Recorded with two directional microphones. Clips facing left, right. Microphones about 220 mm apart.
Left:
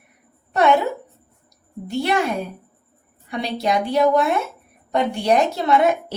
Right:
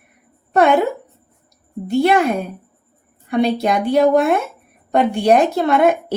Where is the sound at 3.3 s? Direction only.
55° right (ahead or behind).